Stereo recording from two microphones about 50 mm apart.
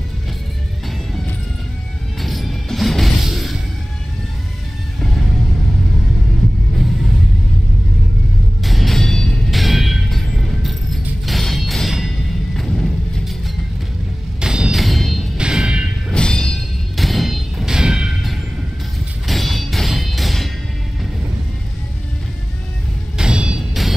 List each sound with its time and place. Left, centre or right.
2.2 s music: centre
8.6 s vehicle: centre
9.5 s music: centre
14.4 s music: centre
14.7 s music: centre
15.3 s music: centre
16.1 s music: centre
16.9 s a sound: centre
17.7 s music: centre
19.2 s music: centre
23.1 s vehicle: centre